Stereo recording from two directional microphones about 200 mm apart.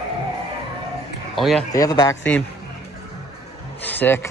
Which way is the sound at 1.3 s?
Centre (ahead or behind).